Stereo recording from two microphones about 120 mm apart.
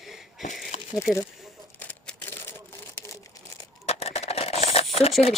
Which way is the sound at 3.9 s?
60° left (ahead or behind).